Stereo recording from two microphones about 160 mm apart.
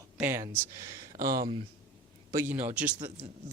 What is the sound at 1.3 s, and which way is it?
Speech, 25° right (ahead or behind).